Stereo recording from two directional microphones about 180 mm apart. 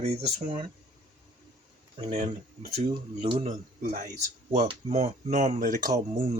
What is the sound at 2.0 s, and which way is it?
Speech, 40° right (ahead or behind).